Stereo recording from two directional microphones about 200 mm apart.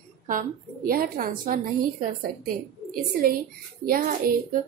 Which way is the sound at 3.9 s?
45° right (ahead or behind).